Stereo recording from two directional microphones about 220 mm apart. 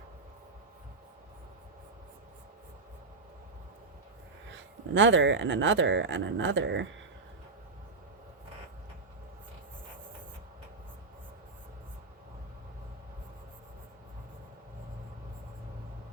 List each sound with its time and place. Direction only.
4.9 s speech: 55° right (ahead or behind)